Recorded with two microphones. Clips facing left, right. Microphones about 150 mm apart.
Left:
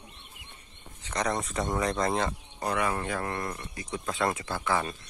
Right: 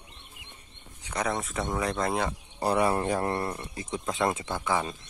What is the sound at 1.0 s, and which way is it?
Speech, 10° right (ahead or behind).